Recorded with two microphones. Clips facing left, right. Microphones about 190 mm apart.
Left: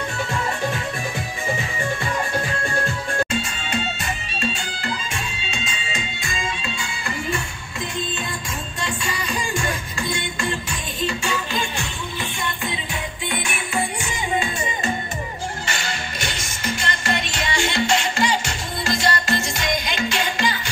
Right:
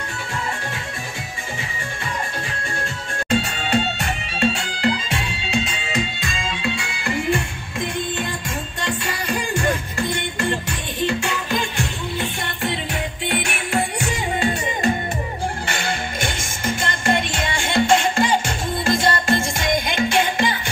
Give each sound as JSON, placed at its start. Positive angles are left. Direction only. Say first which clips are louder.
{"t": 4.0, "sound": "music", "louder": "right 5 dB", "side_deg": -70}
{"t": 9.6, "sound": "music", "louder": "right 5 dB", "side_deg": -60}